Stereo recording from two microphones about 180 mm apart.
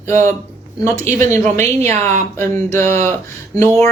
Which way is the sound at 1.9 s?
40° right (ahead or behind).